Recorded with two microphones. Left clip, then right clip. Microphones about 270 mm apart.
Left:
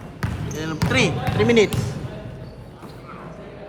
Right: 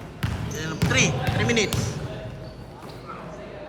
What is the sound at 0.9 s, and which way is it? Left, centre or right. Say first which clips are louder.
Speech: left 2 dB; centre.